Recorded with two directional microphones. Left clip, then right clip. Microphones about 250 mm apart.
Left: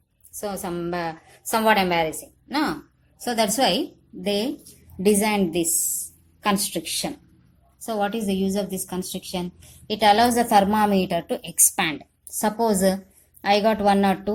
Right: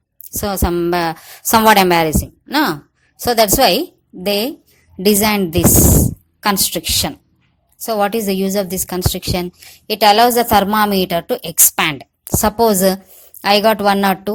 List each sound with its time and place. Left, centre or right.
0.3 s a woman's voice: right